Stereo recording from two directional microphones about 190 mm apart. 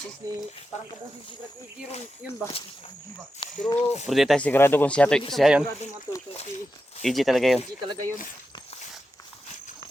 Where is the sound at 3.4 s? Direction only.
25° left (ahead or behind).